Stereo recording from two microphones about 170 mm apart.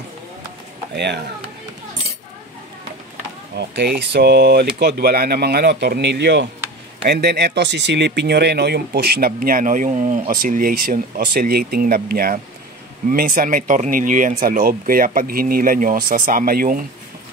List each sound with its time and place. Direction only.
0.9 s speech: 80° right
3.5 s speech: 75° right (ahead or behind)
7.1 s speech: 70° right (ahead or behind)